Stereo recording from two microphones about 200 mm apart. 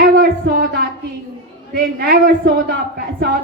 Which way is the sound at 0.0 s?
50° right (ahead or behind).